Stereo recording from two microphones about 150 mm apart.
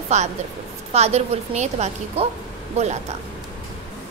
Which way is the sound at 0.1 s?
50° right (ahead or behind).